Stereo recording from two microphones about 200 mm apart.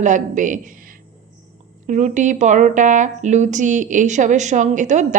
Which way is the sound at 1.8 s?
40° right (ahead or behind).